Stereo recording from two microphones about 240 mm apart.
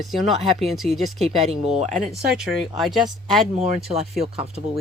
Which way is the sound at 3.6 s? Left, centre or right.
Right.